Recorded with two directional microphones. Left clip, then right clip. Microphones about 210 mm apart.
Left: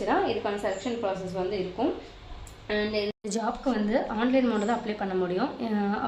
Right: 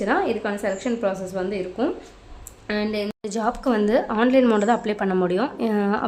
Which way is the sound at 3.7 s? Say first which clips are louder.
Right 8 dB; 55° right (ahead or behind).